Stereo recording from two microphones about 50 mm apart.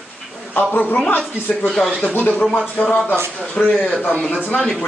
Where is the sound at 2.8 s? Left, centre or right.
Left.